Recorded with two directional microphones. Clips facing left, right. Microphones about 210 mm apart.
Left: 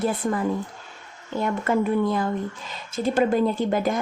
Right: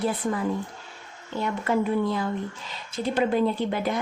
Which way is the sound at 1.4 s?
50° left (ahead or behind).